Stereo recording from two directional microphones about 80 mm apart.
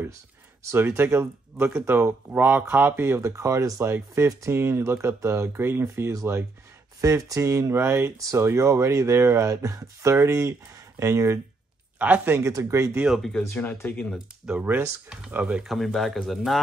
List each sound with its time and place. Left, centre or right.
0.7 s speech: right
12.0 s speech: centre
12.4 s speech: right
13.0 s speech: centre
13.6 s speech: left
14.1 s speech: centre
15.6 s speech: centre